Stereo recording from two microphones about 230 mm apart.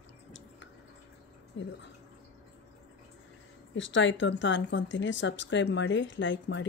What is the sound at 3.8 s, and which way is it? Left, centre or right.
A woman's voice, left.